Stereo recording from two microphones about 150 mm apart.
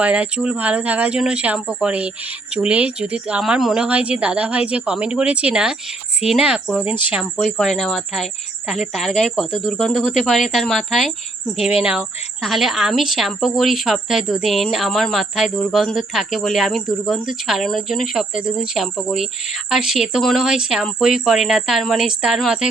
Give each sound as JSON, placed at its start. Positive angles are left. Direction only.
{"t": 0.0, "sound": "a woman's voice", "side_deg": -10}